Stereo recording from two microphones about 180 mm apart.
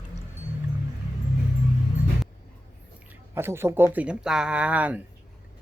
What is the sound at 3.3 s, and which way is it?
Speech, 15° right (ahead or behind).